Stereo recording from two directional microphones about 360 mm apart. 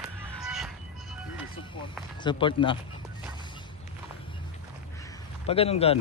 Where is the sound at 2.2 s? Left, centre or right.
Centre.